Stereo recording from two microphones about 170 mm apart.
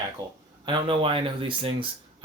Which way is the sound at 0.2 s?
20° right (ahead or behind).